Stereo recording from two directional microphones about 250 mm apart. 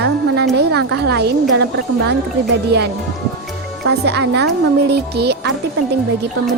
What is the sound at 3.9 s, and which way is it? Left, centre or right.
Speech, right.